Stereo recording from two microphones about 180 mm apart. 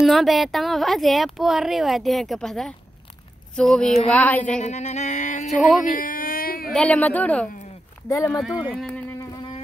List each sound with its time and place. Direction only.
0.0 s speech: centre (ahead or behind)
4.6 s a sound: 40° left (ahead or behind)
5.5 s speech: centre (ahead or behind)
5.9 s baby cry: 50° left (ahead or behind)
6.7 s speech: 5° left (ahead or behind)
8.4 s speech: centre (ahead or behind)
9.2 s music: 25° left (ahead or behind)